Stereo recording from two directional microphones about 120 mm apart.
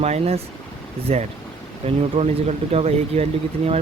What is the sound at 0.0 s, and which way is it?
Speech, 60° right (ahead or behind).